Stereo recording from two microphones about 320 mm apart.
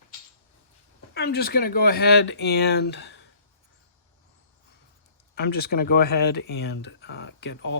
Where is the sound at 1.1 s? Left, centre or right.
Left.